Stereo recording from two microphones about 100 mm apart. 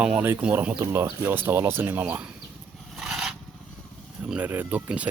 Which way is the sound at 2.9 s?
5° right (ahead or behind).